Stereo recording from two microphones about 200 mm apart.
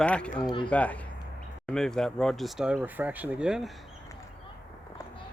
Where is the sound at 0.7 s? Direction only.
5° left (ahead or behind).